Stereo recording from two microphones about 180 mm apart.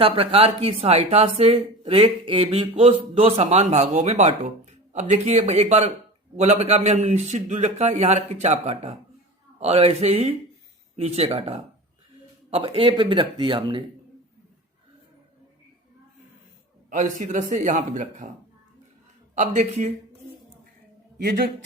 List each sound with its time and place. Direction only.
0.0 s speech: 35° right (ahead or behind)
16.9 s a man's voice: 45° right (ahead or behind)
19.4 s speech: 40° right (ahead or behind)